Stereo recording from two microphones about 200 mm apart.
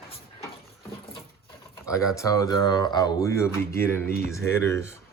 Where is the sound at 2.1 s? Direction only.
15° left (ahead or behind).